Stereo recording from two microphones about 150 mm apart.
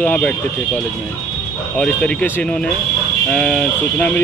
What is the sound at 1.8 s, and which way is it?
Speech, 5° left (ahead or behind).